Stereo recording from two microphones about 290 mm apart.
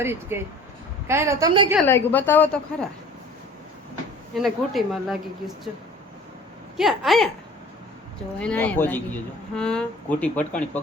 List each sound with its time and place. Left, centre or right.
0.0 s a woman's voice: centre
1.9 s a woman's voice: centre
4.4 s speech: centre
6.7 s speech: centre
8.4 s speech: centre